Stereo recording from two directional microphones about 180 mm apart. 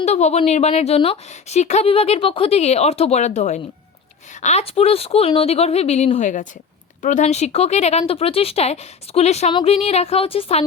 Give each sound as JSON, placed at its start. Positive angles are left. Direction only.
{"t": 0.0, "sound": "a woman's voice", "side_deg": 40}